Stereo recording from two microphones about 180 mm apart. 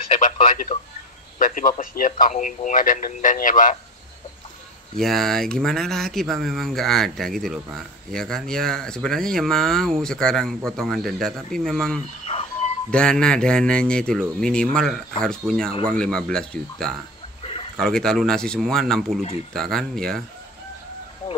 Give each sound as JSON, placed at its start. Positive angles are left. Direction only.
{"t": 0.4, "sound": "speech", "side_deg": 40}
{"t": 4.9, "sound": "speech", "side_deg": 0}
{"t": 12.3, "sound": "music", "side_deg": 35}
{"t": 12.9, "sound": "speech", "side_deg": 5}
{"t": 17.4, "sound": "a sound", "side_deg": 30}
{"t": 17.7, "sound": "speech", "side_deg": 5}